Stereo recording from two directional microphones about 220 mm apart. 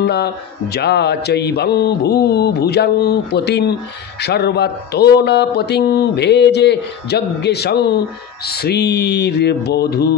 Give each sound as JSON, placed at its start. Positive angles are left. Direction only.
{"t": 0.0, "sound": "speech", "side_deg": 50}